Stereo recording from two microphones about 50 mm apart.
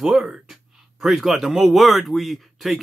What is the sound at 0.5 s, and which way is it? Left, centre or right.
Speech, centre.